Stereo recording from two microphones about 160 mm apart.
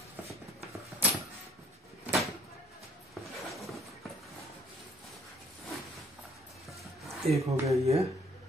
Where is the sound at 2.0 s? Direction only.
Centre (ahead or behind).